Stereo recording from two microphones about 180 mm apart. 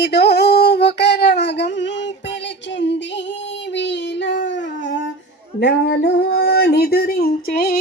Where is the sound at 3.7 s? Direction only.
75° left (ahead or behind).